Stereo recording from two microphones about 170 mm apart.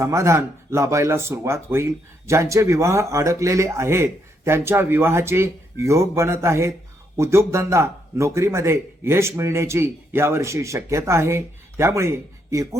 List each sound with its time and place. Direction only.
0.0 s speech: 15° right (ahead or behind)